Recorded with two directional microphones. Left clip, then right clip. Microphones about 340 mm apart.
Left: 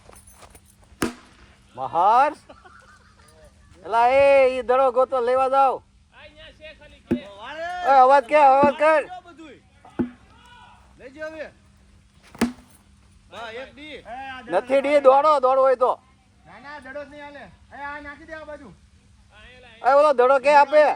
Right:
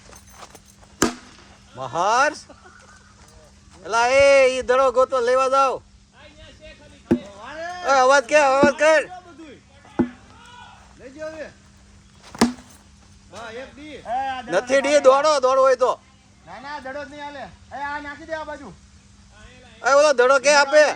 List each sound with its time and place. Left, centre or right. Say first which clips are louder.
1.0 s chop: right 6 dB; centre
1.8 s speech: left 2 dB; centre
3.8 s speech: right 1 dB; centre
6.1 s a sound: left 1 dB; left
7.2 s cat: even; left
7.9 s speech: left 1 dB; centre
10.0 s sheep: right 5 dB; centre
11.0 s a sound: right 1 dB; left
13.3 s speech: even; left
14.1 s a man's voice: right 11 dB; centre
14.5 s speech: right 1 dB; centre
16.5 s a man's voice: right 6 dB; centre
19.8 s speech: right 1 dB; centre